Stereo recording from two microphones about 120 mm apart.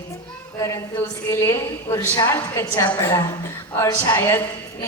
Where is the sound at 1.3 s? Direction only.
20° left (ahead or behind).